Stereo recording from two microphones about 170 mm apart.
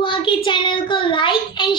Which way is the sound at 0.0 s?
30° left (ahead or behind).